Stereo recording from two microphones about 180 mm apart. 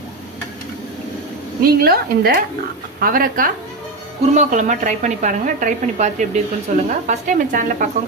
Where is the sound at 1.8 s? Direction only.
55° right (ahead or behind).